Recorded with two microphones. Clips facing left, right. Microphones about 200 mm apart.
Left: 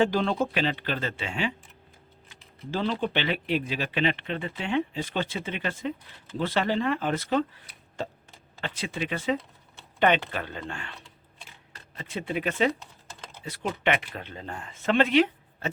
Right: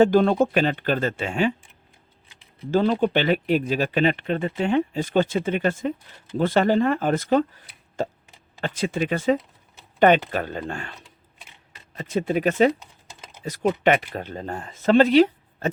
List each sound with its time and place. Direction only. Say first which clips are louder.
0.0 s speech: right 7 dB; 50° right (ahead or behind)
2.6 s speech: right 8 dB; 45° right (ahead or behind)
11.9 s speech: right 8 dB; 40° right (ahead or behind)